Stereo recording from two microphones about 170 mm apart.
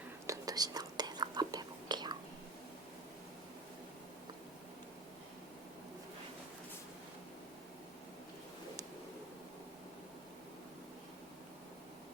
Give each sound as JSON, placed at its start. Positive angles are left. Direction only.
{"t": 0.3, "sound": "whispering", "side_deg": -20}